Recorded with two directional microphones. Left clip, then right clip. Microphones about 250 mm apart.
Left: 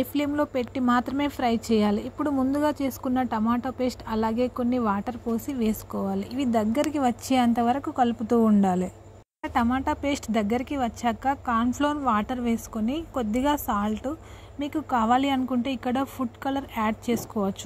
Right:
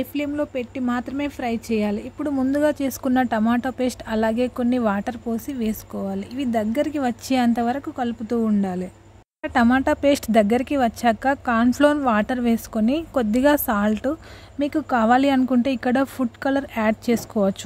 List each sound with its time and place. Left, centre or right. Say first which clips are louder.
0.0 s speech: right 1 dB; centre
9.4 s speech: right 6 dB; right